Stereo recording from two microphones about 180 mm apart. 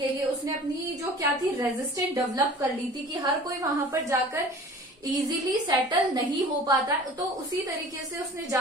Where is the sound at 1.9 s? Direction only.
20° right (ahead or behind).